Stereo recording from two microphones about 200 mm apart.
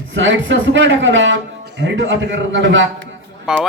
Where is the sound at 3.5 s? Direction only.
5° right (ahead or behind).